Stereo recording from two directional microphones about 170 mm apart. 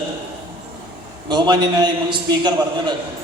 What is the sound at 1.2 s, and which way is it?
A man's voice, 25° right (ahead or behind).